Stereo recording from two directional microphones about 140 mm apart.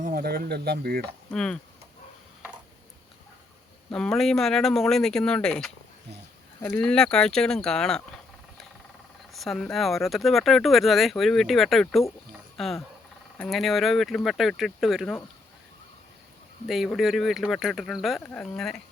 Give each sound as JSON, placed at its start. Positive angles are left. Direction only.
{"t": 0.0, "sound": "speech", "side_deg": -90}
{"t": 1.3, "sound": "speech", "side_deg": 5}
{"t": 3.9, "sound": "speech", "side_deg": 5}
{"t": 9.3, "sound": "speech", "side_deg": 0}
{"t": 12.5, "sound": "cricket", "side_deg": 0}
{"t": 13.4, "sound": "speech", "side_deg": 0}
{"t": 16.6, "sound": "speech", "side_deg": 0}